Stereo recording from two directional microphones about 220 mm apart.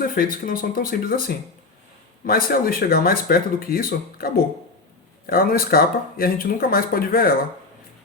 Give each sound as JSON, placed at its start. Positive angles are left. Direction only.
{"t": 0.0, "sound": "speech", "side_deg": 40}